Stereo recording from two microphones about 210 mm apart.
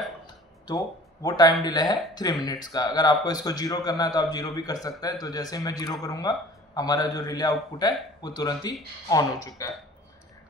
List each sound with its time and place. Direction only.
0.7 s a man's voice: 20° left (ahead or behind)